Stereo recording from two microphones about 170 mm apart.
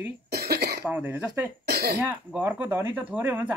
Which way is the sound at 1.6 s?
70° right (ahead or behind).